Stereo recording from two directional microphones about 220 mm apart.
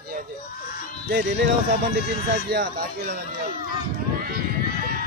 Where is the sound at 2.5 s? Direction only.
45° right (ahead or behind).